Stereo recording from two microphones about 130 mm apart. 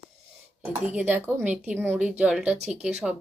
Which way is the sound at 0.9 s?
15° right (ahead or behind).